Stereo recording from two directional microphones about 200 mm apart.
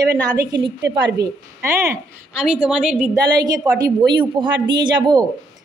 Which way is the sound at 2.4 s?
5° right (ahead or behind).